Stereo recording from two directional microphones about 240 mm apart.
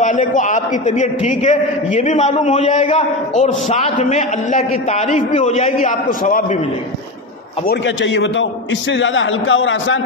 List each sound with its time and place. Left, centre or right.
0.0 s a man's voice: left
7.6 s a man's voice: left